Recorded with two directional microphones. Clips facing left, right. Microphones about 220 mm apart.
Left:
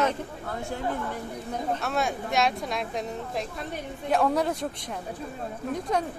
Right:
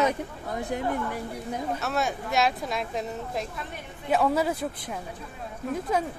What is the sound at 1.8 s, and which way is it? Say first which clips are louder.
A woman's voice: even; centre (ahead or behind).